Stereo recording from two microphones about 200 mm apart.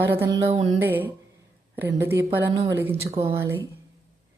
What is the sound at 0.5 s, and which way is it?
Speech, 20° right (ahead or behind).